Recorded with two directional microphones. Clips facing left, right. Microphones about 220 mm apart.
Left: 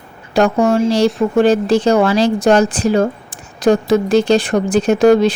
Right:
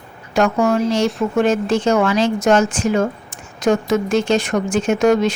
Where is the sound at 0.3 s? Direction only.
35° left (ahead or behind).